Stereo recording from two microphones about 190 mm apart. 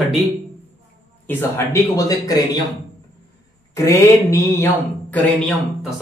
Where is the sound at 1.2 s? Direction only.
10° left (ahead or behind).